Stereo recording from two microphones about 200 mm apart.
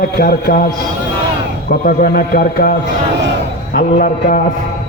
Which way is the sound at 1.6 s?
50° left (ahead or behind).